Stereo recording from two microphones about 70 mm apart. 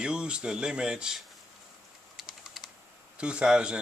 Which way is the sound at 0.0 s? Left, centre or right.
Centre.